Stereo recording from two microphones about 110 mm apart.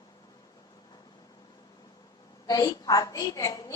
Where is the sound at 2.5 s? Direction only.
30° left (ahead or behind).